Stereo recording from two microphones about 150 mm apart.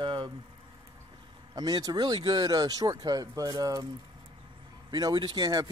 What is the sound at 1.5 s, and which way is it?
Speech, 25° right (ahead or behind).